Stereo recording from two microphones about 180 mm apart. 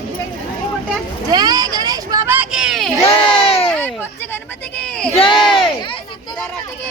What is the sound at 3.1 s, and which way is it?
Crowd, 30° left (ahead or behind).